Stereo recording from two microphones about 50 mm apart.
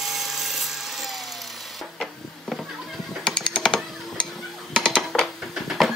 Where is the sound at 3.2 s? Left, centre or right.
Centre.